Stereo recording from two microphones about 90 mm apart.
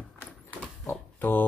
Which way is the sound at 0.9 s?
20° left (ahead or behind).